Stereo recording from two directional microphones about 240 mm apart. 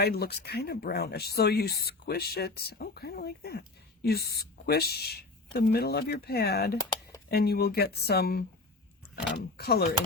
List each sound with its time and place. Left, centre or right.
0.0 s speech: left